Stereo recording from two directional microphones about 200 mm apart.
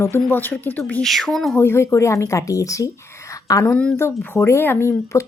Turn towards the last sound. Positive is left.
turn(degrees=15)  # may be behind; listen again after turning